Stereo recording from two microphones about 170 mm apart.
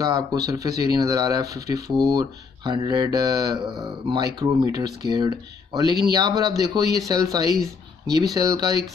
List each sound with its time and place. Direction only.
0.0 s speech: 20° right (ahead or behind)